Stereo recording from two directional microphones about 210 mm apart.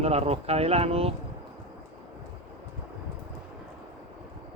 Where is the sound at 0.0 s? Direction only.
30° right (ahead or behind).